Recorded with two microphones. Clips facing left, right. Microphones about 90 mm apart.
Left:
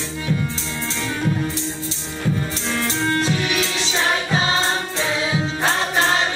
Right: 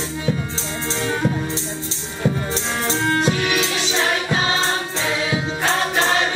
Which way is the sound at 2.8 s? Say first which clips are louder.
Right 3 dB; 25° right (ahead or behind).